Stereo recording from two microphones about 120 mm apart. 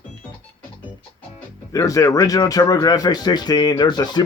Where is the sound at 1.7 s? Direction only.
30° left (ahead or behind).